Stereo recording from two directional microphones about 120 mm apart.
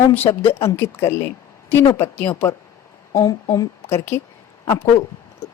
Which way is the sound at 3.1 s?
30° left (ahead or behind).